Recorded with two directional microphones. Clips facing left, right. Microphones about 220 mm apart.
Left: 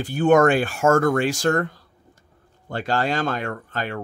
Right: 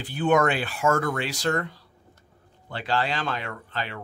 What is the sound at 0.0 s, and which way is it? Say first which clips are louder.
Speech: left 6 dB; 45° left (ahead or behind).